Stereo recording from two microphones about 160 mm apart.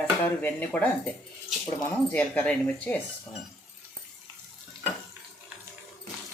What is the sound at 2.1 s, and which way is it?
Speech, 10° left (ahead or behind).